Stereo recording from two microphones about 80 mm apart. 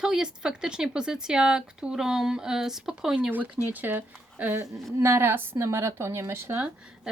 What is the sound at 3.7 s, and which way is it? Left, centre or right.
Speech, right.